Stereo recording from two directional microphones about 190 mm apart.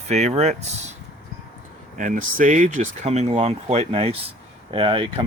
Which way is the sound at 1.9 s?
45° right (ahead or behind).